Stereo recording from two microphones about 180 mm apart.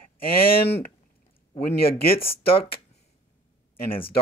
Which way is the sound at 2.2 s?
30° left (ahead or behind).